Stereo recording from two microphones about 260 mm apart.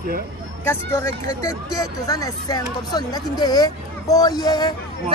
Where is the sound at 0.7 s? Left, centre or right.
Centre.